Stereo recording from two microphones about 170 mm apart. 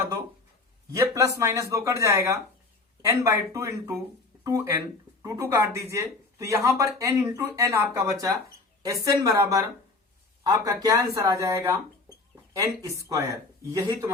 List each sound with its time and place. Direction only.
0.9 s speech: 20° right (ahead or behind)